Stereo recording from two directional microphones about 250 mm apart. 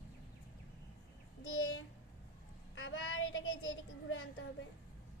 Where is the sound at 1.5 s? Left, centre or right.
Left.